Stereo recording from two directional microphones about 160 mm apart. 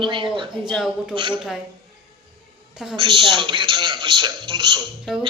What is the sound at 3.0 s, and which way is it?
Speech, 30° right (ahead or behind).